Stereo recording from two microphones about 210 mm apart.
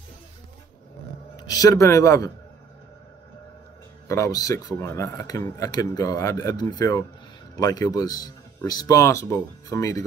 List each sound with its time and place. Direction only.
1.3 s speech: 15° left (ahead or behind)
4.1 s speech: 15° left (ahead or behind)